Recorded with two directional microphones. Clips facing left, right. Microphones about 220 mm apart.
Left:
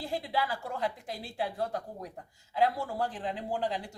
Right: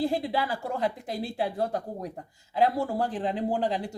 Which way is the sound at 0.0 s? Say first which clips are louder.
Right 6 dB; 25° right (ahead or behind).